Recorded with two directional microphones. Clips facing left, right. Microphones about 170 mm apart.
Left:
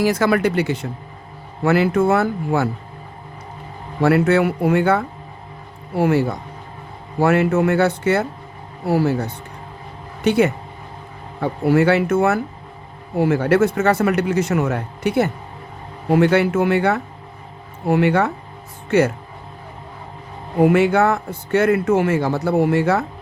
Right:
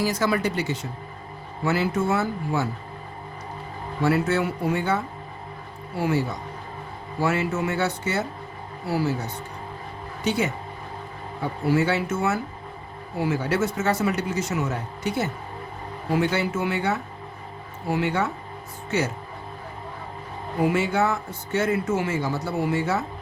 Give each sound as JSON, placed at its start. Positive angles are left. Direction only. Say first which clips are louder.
{"t": 0.0, "sound": "a man's voice", "louder": "left 6 dB", "side_deg": 65}
{"t": 4.0, "sound": "a man's voice", "louder": "left 7 dB", "side_deg": 65}
{"t": 20.6, "sound": "a man's voice", "louder": "left 8 dB", "side_deg": 60}